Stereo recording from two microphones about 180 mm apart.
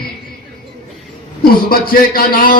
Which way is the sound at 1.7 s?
55° left (ahead or behind).